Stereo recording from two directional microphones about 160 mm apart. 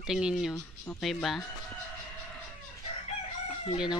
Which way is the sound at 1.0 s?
Centre (ahead or behind).